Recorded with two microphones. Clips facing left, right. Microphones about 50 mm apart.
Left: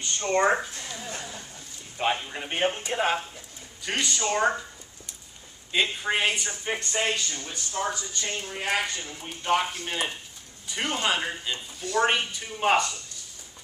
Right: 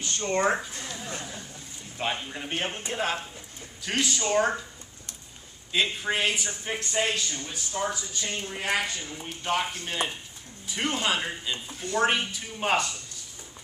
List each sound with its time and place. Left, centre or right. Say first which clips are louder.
0.0 s speech: left 2 dB; centre
0.8 s a sound: even; centre
2.0 s speech: left 4 dB; centre
5.7 s speech: left 1 dB; centre
8.5 s speech: left 1 dB; centre